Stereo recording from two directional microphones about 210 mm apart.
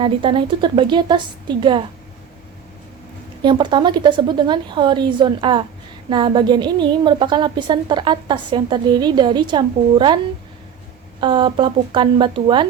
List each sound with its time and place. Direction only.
0.0 s a woman's voice: 25° right (ahead or behind)
3.4 s a woman's voice: 20° right (ahead or behind)
11.2 s a woman's voice: 20° right (ahead or behind)